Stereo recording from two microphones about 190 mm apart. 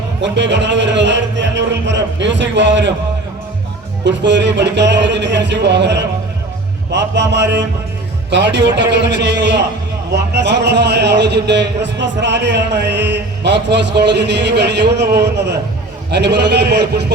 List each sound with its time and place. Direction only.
0.2 s speech: 70° right (ahead or behind)
4.0 s a man's voice: 70° right (ahead or behind)